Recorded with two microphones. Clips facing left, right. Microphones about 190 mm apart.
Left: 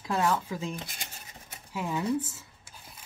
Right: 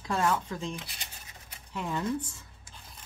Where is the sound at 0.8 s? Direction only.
45° left (ahead or behind).